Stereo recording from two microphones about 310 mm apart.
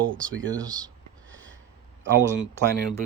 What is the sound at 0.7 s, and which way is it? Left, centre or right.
Speech, centre.